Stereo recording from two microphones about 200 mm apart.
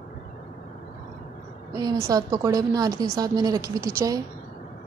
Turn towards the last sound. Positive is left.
turn(degrees=-15)  # may be behind; listen again after turning